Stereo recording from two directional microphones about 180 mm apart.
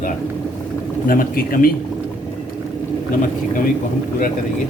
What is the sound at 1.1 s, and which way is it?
Speech, 55° left (ahead or behind).